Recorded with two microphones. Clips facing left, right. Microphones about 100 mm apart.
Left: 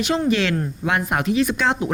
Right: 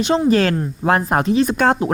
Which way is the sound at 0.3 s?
40° right (ahead or behind).